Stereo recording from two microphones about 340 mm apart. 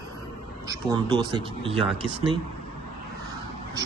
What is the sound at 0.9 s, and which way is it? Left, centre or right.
Speech, centre.